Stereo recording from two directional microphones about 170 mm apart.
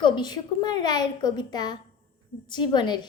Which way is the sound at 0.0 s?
25° left (ahead or behind).